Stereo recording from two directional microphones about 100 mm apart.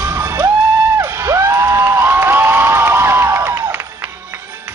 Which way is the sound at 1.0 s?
25° right (ahead or behind).